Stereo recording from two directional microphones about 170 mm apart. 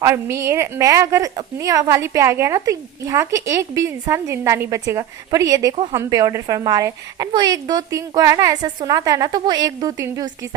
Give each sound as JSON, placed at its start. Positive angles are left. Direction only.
{"t": 0.0, "sound": "a woman's voice", "side_deg": -15}